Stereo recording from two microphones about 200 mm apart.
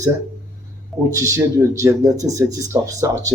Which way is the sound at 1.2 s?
15° right (ahead or behind).